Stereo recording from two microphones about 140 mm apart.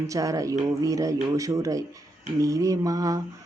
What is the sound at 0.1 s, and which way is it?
Speech, 25° right (ahead or behind).